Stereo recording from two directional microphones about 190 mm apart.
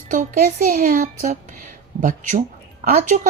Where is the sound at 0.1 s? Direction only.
45° right (ahead or behind).